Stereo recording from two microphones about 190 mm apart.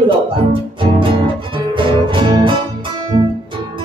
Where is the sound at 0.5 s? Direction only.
25° right (ahead or behind).